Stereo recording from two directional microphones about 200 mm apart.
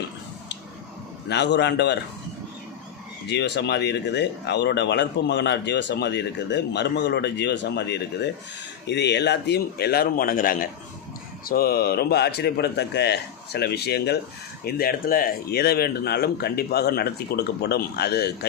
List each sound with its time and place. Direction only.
1.3 s speech: 60° left (ahead or behind)
3.2 s speech: 60° left (ahead or behind)